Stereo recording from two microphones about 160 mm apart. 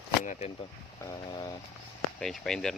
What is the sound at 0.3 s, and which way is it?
Speech, 45° left (ahead or behind).